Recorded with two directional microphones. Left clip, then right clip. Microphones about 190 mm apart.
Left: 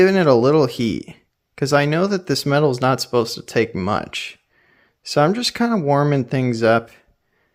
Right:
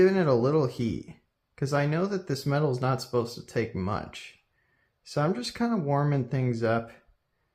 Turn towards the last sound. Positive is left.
turn(degrees=50)  # may be behind; listen again after turning